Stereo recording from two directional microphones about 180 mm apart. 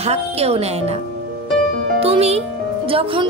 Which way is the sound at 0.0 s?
35° right (ahead or behind).